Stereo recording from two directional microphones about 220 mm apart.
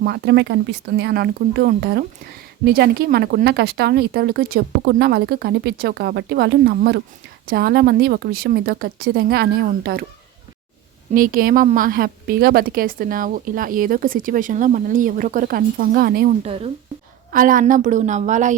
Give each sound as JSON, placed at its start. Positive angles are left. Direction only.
{"t": 0.0, "sound": "speech", "side_deg": -50}
{"t": 11.1, "sound": "a woman's voice", "side_deg": -40}
{"t": 16.4, "sound": "speech", "side_deg": -25}
{"t": 17.3, "sound": "a woman's voice", "side_deg": -40}